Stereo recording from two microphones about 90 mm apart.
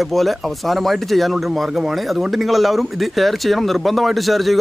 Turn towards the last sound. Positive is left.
turn(degrees=0)  # may be behind; listen again after turning